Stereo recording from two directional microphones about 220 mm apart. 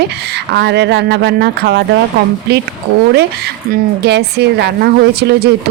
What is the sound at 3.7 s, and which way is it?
Speech, 50° right (ahead or behind).